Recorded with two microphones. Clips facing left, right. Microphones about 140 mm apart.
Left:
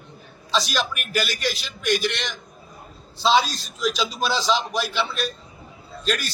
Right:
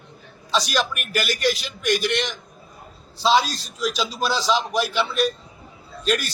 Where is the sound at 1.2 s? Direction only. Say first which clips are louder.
Right 5 dB; 50° right (ahead or behind).